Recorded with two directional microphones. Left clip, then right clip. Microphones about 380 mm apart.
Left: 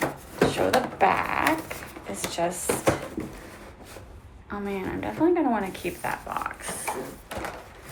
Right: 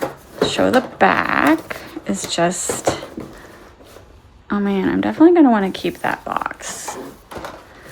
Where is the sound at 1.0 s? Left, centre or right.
Right.